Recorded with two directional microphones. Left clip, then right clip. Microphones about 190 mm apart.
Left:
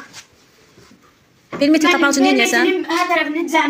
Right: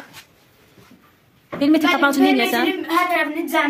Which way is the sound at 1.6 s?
15° right (ahead or behind).